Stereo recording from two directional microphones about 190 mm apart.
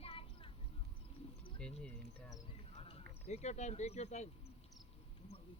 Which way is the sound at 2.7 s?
35° left (ahead or behind).